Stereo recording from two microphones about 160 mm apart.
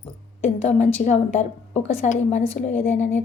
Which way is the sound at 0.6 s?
45° left (ahead or behind).